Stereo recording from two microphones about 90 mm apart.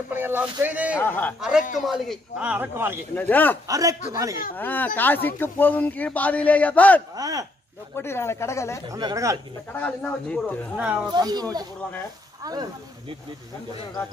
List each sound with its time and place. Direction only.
0.1 s speech: 25° right (ahead or behind)
1.0 s speech: 20° left (ahead or behind)
1.4 s a man's voice: 5° right (ahead or behind)
2.4 s speech: 15° right (ahead or behind)
2.7 s speech: 25° right (ahead or behind)
3.2 s speech: 20° left (ahead or behind)
3.6 s a man's voice: 40° right (ahead or behind)
4.6 s speech: 20° left (ahead or behind)
7.2 s a child's voice: 45° right (ahead or behind)
7.9 s speech: 25° left (ahead or behind)
8.9 s a man's voice: 40° right (ahead or behind)
9.8 s speech: 15° left (ahead or behind)
10.8 s speech: 15° right (ahead or behind)
11.1 s a child's voice: 50° right (ahead or behind)